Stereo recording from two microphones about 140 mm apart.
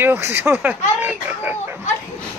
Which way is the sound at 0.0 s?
15° right (ahead or behind).